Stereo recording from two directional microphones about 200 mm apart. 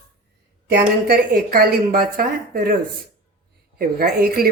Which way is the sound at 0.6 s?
50° right (ahead or behind).